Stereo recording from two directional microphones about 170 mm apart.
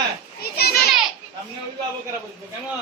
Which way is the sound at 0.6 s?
65° left (ahead or behind).